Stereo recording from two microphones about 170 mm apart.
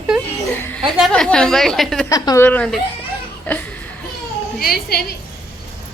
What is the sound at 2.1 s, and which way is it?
Speech, 15° left (ahead or behind).